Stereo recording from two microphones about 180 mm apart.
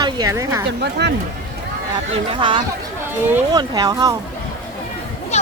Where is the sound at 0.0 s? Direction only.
20° right (ahead or behind).